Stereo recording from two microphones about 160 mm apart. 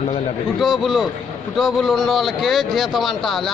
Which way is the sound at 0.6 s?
Centre (ahead or behind).